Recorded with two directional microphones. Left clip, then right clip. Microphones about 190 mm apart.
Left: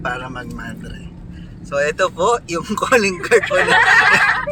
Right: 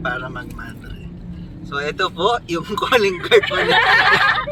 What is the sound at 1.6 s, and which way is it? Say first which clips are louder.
Speech: left 4 dB; 30° left (ahead or behind).